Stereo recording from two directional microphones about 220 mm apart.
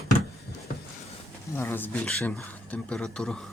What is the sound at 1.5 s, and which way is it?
Speech, 10° left (ahead or behind).